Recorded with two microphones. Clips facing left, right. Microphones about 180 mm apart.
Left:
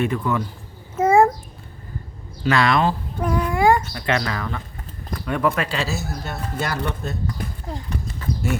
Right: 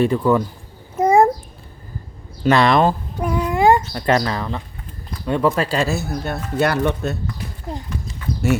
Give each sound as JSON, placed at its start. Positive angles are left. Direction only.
{"t": 0.0, "sound": "speech", "side_deg": -35}
{"t": 0.9, "sound": "babbling", "side_deg": -15}
{"t": 2.4, "sound": "speech", "side_deg": -35}
{"t": 3.2, "sound": "a sound", "side_deg": -10}
{"t": 3.4, "sound": "a sound", "side_deg": -20}
{"t": 3.9, "sound": "speech", "side_deg": -40}
{"t": 5.9, "sound": "speech", "side_deg": -60}